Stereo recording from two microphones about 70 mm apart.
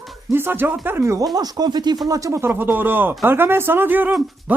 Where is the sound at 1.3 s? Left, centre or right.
Right.